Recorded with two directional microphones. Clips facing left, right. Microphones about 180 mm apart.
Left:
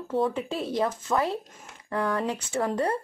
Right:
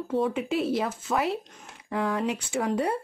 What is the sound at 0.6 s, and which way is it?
Speech, 5° right (ahead or behind).